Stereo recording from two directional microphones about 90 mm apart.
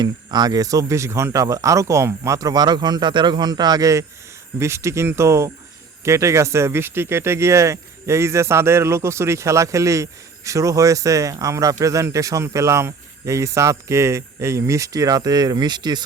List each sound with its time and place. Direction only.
0.0 s speech: 50° right (ahead or behind)